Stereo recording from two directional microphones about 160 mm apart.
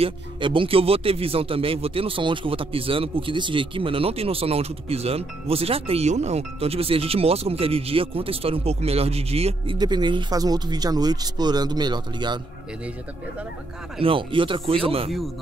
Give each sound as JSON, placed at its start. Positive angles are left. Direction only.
{"t": 0.0, "sound": "speech", "side_deg": -30}
{"t": 9.8, "sound": "speech", "side_deg": -25}
{"t": 14.0, "sound": "speech", "side_deg": -30}